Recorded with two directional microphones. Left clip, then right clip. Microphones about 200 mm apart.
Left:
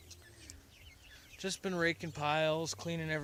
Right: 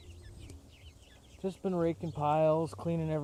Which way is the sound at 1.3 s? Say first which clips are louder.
Right 2 dB; 25° left (ahead or behind).